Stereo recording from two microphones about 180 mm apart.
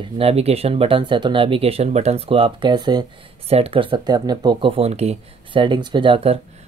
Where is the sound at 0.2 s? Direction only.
35° right (ahead or behind).